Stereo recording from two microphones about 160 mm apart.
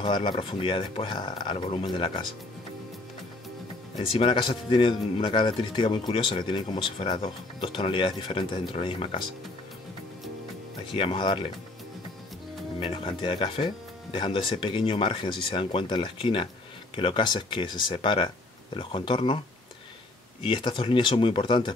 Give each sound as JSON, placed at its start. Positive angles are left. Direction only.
{"t": 0.0, "sound": "speech", "side_deg": 30}
{"t": 4.1, "sound": "speech", "side_deg": 30}
{"t": 10.9, "sound": "speech", "side_deg": 30}
{"t": 12.8, "sound": "speech", "side_deg": 30}
{"t": 20.4, "sound": "speech", "side_deg": 30}